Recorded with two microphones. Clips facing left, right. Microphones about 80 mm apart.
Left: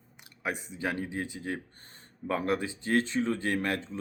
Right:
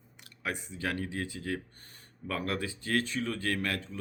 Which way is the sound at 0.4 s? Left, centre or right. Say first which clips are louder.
Left 2 dB; centre.